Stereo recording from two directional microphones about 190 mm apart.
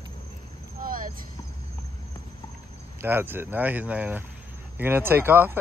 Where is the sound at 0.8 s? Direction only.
45° right (ahead or behind).